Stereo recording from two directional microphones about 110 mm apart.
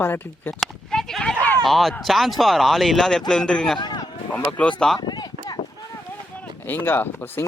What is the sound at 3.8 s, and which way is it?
Speech, 40° left (ahead or behind).